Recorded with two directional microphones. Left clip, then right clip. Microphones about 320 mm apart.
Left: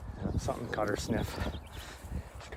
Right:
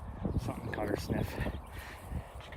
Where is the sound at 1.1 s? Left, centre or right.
Left.